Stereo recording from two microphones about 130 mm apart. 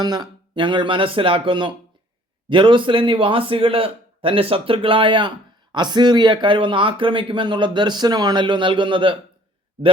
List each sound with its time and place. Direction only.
0.0 s a man's voice: 35° right (ahead or behind)